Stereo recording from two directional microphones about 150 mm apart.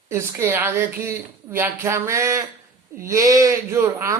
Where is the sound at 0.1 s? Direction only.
20° right (ahead or behind).